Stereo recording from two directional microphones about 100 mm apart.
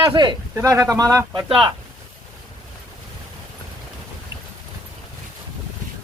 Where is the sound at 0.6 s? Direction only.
35° right (ahead or behind).